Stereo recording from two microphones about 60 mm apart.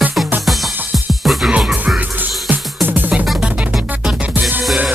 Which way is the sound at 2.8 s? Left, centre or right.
Right.